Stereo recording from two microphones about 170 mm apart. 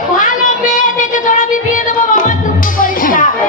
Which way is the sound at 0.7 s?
50° left (ahead or behind).